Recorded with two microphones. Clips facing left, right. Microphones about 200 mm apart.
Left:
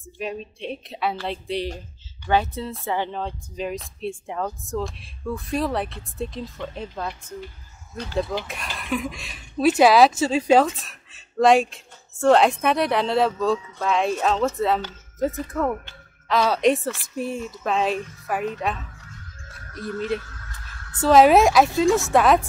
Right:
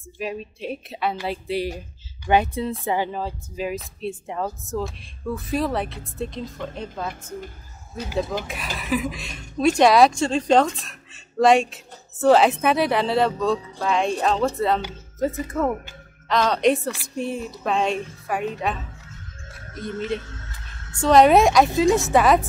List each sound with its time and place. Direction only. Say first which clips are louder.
0.2 s a woman's voice: right 1 dB; 5° right (ahead or behind)
19.6 s speech: even; 25° right (ahead or behind)
20.2 s a sound: right 2 dB; 25° right (ahead or behind)
21.0 s speech: even; 5° left (ahead or behind)